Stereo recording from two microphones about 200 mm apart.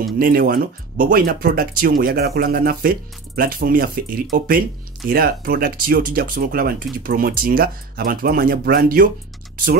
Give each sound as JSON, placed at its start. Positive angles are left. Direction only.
{"t": 0.2, "sound": "speech", "side_deg": -45}